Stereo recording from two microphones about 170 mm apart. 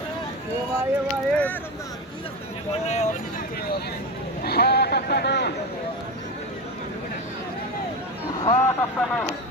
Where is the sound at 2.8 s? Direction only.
40° left (ahead or behind).